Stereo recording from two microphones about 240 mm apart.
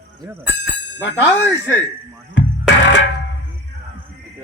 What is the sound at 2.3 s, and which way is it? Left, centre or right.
Music, left.